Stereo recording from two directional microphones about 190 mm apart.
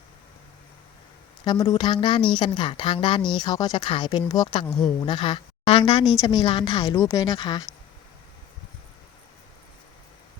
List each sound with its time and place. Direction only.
1.5 s speech: 20° left (ahead or behind)
4.6 s speech: centre (ahead or behind)
4.9 s speech: 25° left (ahead or behind)